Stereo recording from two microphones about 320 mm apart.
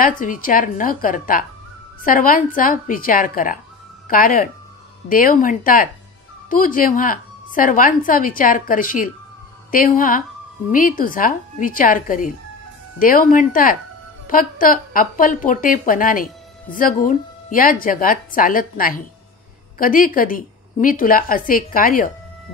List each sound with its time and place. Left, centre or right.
0.0 s a woman's voice: left